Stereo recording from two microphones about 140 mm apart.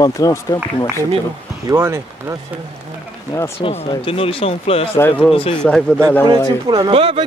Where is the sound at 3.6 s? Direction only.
50° left (ahead or behind).